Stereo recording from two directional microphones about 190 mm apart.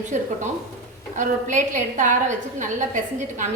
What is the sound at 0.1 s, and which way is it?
A woman's voice, 40° right (ahead or behind).